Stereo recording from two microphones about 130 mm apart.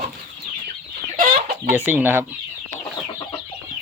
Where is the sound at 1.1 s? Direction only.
90° right.